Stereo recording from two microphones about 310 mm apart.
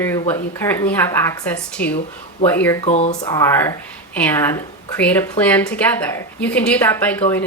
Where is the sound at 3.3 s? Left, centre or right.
Centre.